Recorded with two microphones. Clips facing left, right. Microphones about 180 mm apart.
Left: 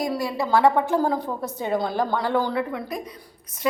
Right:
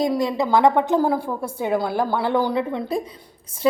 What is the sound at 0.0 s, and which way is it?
A woman's voice, 20° right (ahead or behind).